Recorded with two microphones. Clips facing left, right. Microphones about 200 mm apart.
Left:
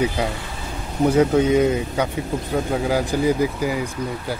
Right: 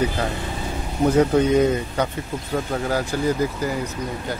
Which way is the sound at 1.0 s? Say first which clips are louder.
Left 1 dB; 5° left (ahead or behind).